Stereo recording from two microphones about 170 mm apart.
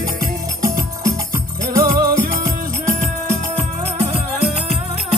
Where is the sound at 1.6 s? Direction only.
60° right (ahead or behind).